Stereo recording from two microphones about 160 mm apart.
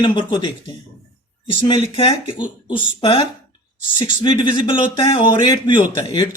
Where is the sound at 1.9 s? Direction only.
30° left (ahead or behind).